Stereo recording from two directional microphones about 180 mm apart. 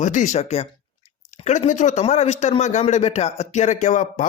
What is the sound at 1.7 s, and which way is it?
Speech, 45° left (ahead or behind).